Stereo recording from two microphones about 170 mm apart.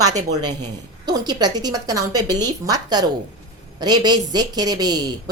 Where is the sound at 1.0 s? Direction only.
25° right (ahead or behind).